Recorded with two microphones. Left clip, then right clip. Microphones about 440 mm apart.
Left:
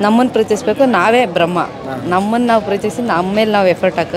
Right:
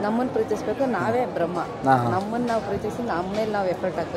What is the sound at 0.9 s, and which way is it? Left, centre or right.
A woman's voice, left.